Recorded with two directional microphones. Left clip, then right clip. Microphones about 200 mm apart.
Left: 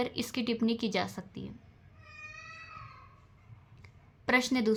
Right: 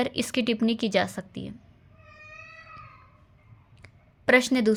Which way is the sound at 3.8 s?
30° right (ahead or behind).